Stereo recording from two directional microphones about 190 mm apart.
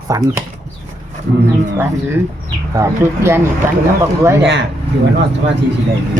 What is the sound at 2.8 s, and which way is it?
Speech, 15° right (ahead or behind).